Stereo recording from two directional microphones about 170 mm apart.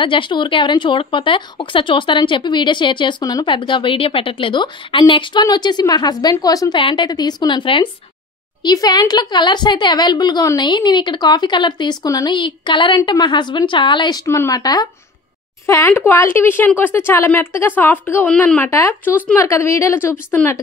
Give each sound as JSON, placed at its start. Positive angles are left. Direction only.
{"t": 0.0, "sound": "speech", "side_deg": 30}